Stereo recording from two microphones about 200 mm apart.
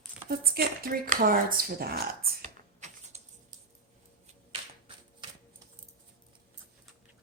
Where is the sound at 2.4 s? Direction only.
35° right (ahead or behind).